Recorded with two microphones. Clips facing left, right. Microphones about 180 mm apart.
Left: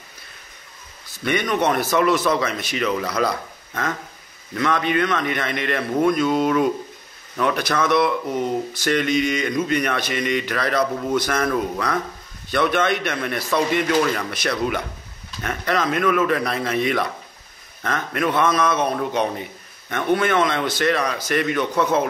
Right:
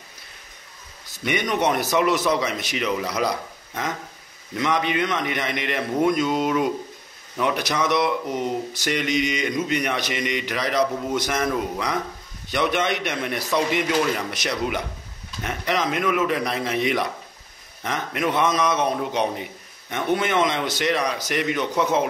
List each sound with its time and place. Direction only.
1.2 s a man's voice: 15° right (ahead or behind)